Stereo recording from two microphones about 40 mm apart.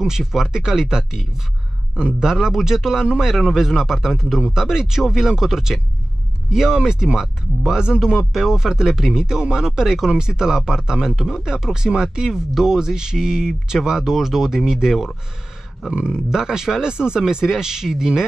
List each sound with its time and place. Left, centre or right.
0.0 s a man's voice: centre
15.9 s a man's voice: right
16.3 s a man's voice: centre